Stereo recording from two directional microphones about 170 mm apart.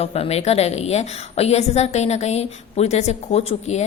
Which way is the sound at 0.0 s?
35° left (ahead or behind).